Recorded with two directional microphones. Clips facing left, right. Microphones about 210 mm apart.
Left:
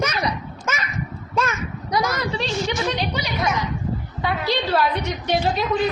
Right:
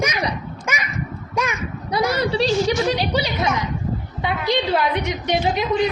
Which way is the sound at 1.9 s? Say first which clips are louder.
Right 4 dB; 30° right (ahead or behind).